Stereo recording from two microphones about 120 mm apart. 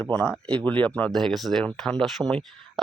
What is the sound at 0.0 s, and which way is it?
Speech, 10° left (ahead or behind).